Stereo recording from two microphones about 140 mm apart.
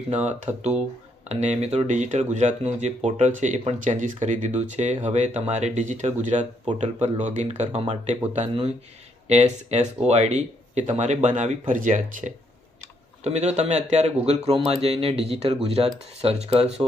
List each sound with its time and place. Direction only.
0.1 s speech: 55° right (ahead or behind)
3.6 s speech: 45° right (ahead or behind)
4.0 s speech: 60° right (ahead or behind)
9.2 s speech: 50° right (ahead or behind)
13.2 s speech: 50° right (ahead or behind)